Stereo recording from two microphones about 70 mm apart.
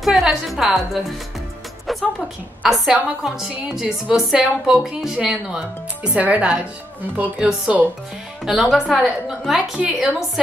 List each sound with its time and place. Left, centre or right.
0.0 s a woman's voice: centre
1.9 s a woman's voice: centre
7.3 s a woman's voice: centre